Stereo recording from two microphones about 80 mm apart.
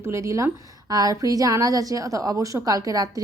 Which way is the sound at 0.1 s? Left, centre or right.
Right.